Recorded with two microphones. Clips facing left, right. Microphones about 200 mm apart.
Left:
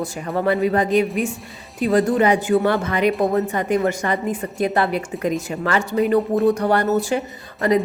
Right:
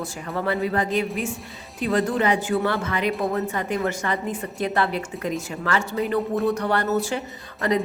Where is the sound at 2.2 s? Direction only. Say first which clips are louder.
Left 5 dB; 15° left (ahead or behind).